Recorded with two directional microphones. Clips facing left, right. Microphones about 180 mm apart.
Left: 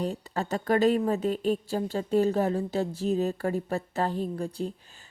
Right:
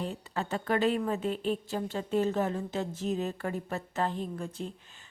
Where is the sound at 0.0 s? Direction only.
40° left (ahead or behind).